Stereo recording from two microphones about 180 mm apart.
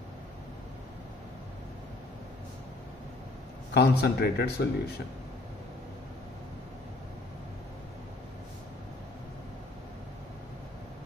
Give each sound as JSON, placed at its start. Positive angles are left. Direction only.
{"t": 3.7, "sound": "speech", "side_deg": 65}